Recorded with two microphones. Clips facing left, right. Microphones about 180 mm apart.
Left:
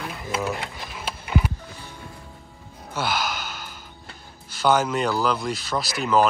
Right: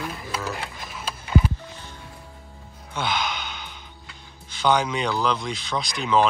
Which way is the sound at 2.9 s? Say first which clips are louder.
Left 1 dB; 5° left (ahead or behind).